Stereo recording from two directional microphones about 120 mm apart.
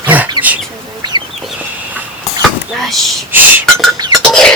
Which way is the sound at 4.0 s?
35° right (ahead or behind).